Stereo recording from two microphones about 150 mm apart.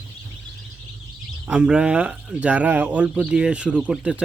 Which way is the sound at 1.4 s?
5° right (ahead or behind).